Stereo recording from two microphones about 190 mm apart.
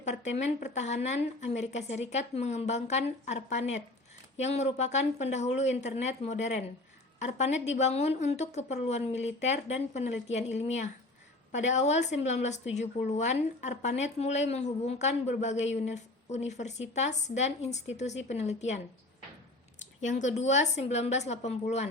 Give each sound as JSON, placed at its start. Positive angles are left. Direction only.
{"t": 0.0, "sound": "speech", "side_deg": 35}
{"t": 20.0, "sound": "speech", "side_deg": 40}